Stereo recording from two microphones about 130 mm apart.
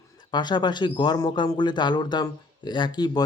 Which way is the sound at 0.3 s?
35° left (ahead or behind).